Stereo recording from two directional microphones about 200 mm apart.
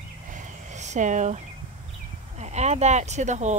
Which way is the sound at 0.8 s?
35° right (ahead or behind).